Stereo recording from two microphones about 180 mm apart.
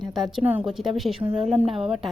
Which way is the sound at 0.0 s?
Centre (ahead or behind).